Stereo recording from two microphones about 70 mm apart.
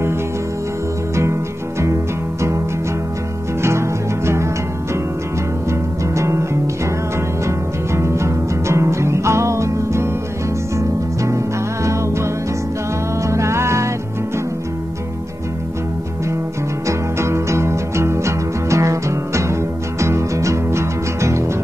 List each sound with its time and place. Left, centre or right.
3.6 s music: right
5.7 s music: right
16.8 s music: right